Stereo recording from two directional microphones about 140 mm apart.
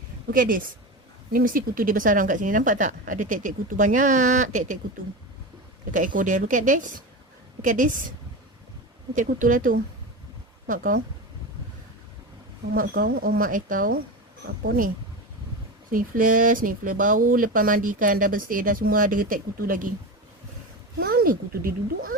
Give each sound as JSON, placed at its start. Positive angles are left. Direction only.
{"t": 0.3, "sound": "speech", "side_deg": -80}
{"t": 6.1, "sound": "speech", "side_deg": -65}
{"t": 9.1, "sound": "speech", "side_deg": -70}
{"t": 12.7, "sound": "speech", "side_deg": -90}
{"t": 15.9, "sound": "speech", "side_deg": -80}
{"t": 21.0, "sound": "speech", "side_deg": -90}